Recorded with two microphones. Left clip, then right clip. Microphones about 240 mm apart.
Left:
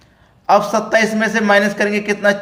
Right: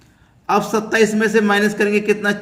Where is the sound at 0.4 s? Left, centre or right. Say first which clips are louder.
Left 4 dB; centre.